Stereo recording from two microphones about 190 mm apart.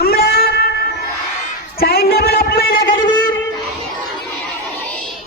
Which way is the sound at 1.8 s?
55° left (ahead or behind).